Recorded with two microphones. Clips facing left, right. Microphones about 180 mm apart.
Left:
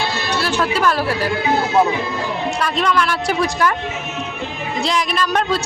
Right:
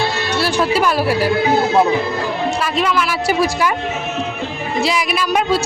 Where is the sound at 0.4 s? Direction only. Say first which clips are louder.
Right 2 dB; 10° right (ahead or behind).